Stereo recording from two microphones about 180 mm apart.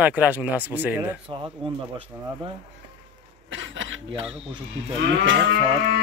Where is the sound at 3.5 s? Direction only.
90° right.